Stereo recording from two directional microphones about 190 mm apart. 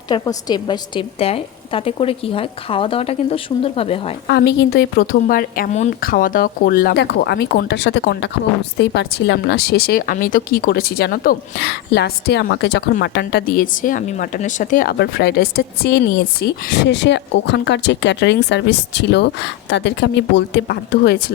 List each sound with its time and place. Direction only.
0.1 s a woman's voice: 20° left (ahead or behind)
4.3 s speech: 60° left (ahead or behind)